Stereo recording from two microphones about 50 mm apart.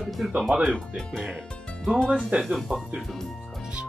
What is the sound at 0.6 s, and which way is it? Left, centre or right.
Speech, centre.